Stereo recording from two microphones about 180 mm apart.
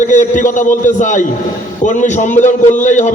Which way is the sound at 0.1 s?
45° left (ahead or behind).